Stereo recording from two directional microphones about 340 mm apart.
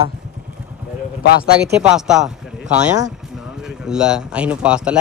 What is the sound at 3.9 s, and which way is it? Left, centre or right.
Speech, centre.